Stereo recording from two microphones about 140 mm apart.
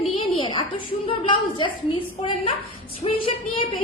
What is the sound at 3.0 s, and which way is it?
Speech, 40° left (ahead or behind).